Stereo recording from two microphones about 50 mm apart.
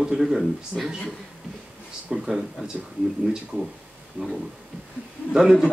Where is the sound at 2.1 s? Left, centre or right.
Centre.